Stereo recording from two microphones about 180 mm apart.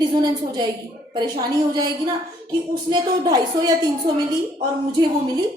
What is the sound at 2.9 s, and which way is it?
Speech, 25° right (ahead or behind).